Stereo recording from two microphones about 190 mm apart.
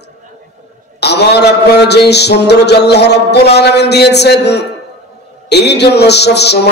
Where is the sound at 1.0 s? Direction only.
60° left (ahead or behind).